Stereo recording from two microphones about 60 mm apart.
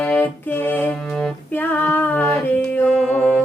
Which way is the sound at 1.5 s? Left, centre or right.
Left.